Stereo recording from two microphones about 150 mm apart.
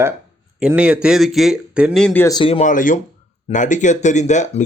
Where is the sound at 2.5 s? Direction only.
55° left (ahead or behind).